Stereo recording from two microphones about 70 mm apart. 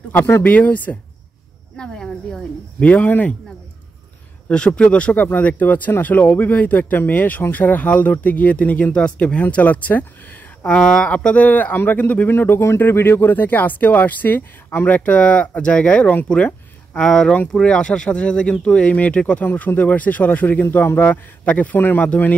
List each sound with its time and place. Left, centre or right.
0.4 s speech: left
1.8 s speech: centre
2.8 s speech: left
4.5 s speech: centre
10.8 s speech: centre
16.9 s speech: centre; by 22.4 s left